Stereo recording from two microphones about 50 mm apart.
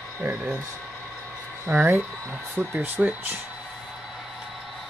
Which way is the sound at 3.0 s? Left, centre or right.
Right.